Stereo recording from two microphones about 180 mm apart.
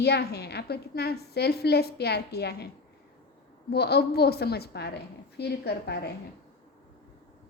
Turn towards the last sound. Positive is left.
turn(degrees=65)  # may be behind; listen again after turning